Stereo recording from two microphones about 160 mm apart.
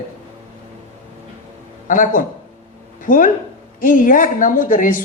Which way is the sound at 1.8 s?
55° left (ahead or behind).